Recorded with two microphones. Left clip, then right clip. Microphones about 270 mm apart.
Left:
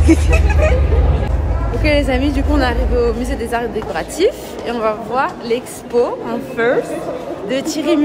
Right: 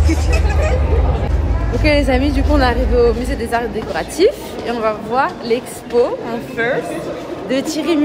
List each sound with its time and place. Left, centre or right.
0.0 s speech: centre
1.8 s a woman's voice: centre